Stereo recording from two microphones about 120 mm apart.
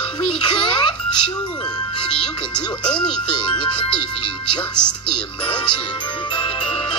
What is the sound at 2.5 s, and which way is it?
Speech, 40° left (ahead or behind).